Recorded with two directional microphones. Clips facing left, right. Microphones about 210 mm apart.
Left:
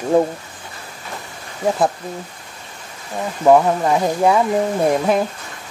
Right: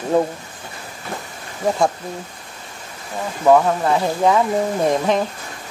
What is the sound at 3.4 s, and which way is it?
Speech, 10° left (ahead or behind).